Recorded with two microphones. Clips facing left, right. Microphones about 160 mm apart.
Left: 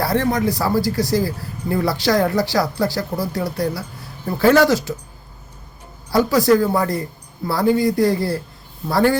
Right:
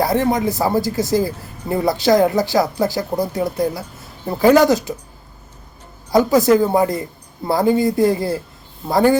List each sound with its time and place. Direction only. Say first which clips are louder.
0.0 s speech: right 2 dB; 20° right (ahead or behind)
6.1 s speech: right 2 dB; 20° right (ahead or behind)